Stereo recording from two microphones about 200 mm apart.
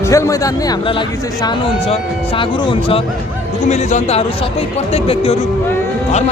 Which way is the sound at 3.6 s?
35° left (ahead or behind).